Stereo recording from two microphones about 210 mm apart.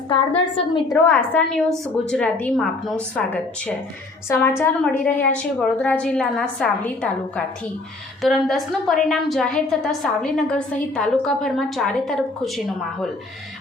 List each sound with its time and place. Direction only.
0.5 s a woman's voice: 20° left (ahead or behind)
1.1 s a woman's voice: 5° left (ahead or behind)